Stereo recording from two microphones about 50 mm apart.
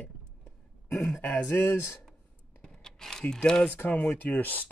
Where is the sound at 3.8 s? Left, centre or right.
Left.